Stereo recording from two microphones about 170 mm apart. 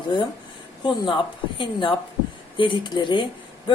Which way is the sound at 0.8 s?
30° left (ahead or behind).